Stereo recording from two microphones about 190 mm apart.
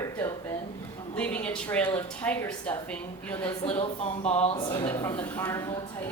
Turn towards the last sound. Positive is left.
turn(degrees=15)  # may be behind; listen again after turning